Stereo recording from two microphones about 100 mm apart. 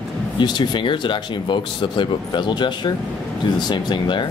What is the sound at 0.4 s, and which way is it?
Speech, 50° left (ahead or behind).